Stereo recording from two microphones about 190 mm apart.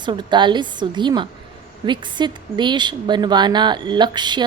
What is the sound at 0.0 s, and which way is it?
A woman's voice, 25° right (ahead or behind).